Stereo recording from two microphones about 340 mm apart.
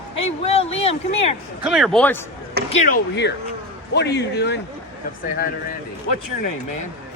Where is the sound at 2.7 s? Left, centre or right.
Left.